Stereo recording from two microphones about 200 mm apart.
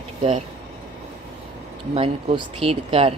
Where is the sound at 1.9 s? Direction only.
25° right (ahead or behind).